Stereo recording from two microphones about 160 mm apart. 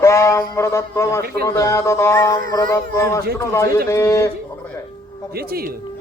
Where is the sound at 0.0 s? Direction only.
20° left (ahead or behind).